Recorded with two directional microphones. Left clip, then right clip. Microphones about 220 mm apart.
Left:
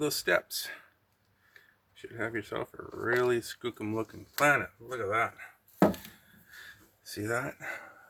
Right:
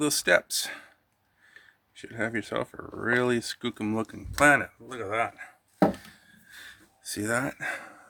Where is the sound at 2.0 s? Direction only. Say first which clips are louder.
Right 4 dB; 50° right (ahead or behind).